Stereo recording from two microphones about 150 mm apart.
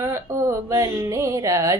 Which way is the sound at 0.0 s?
20° right (ahead or behind).